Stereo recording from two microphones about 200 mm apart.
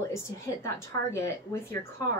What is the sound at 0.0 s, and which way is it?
Speech, 15° left (ahead or behind).